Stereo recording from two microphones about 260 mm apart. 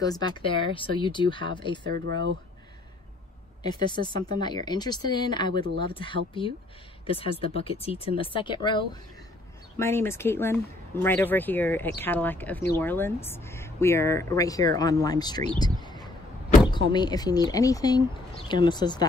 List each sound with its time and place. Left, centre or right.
0.0 s speech: centre
2.0 s speech: right
3.6 s speech: centre
15.8 s a sound: centre
16.7 s speech: centre